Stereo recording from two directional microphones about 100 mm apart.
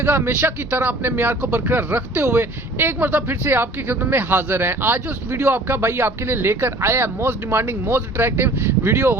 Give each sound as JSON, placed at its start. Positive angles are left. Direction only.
{"t": 0.0, "sound": "speech", "side_deg": -20}